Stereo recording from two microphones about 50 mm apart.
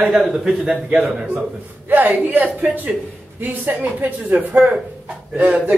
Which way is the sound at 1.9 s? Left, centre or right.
Right.